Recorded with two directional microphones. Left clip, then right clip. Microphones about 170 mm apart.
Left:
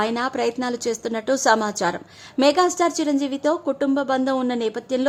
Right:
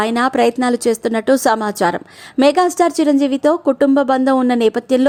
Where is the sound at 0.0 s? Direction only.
35° right (ahead or behind).